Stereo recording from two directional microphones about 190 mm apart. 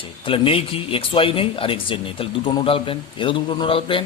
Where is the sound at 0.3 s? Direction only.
30° left (ahead or behind).